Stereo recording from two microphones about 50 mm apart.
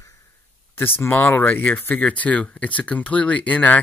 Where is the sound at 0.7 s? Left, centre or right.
Left.